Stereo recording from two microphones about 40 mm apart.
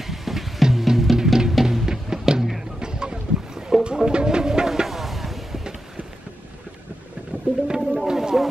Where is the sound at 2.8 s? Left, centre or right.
Centre.